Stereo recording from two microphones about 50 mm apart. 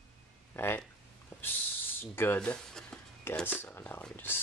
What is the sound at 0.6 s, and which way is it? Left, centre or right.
Speech, left.